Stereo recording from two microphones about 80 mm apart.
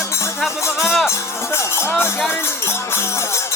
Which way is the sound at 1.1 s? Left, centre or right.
Left.